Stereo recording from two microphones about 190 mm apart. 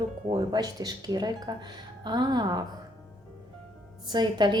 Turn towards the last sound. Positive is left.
turn(degrees=-20)  # may be behind; listen again after turning